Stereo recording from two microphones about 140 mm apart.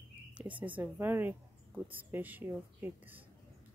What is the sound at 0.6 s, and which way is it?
Speech, 10° right (ahead or behind).